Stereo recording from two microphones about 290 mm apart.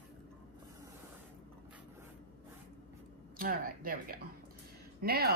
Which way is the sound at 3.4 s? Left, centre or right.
Right.